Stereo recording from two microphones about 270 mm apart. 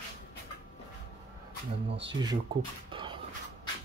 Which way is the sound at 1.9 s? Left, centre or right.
Right.